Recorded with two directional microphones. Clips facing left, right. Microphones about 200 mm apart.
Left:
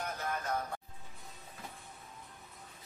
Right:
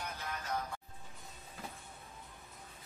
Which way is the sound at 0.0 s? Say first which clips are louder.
Left 5 dB; 50° left (ahead or behind).